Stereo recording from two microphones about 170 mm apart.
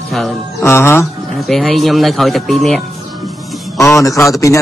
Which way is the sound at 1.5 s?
Centre (ahead or behind).